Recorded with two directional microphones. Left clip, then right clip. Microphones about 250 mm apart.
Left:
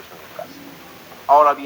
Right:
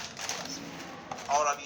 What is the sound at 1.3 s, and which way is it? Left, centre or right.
Speech, left.